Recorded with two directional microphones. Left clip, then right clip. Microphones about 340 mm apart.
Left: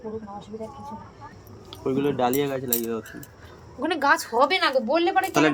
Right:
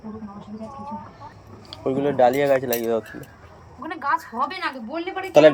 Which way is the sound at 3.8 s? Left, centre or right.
Left.